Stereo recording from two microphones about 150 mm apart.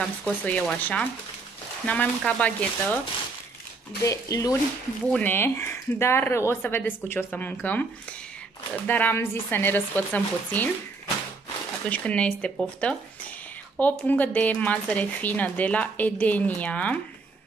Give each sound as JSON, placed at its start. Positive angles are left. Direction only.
{"t": 0.0, "sound": "speech", "side_deg": 5}
{"t": 4.0, "sound": "speech", "side_deg": 20}
{"t": 8.8, "sound": "speech", "side_deg": 10}
{"t": 11.9, "sound": "speech", "side_deg": 10}